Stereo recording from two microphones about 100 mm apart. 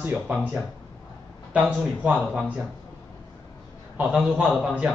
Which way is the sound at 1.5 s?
15° right (ahead or behind).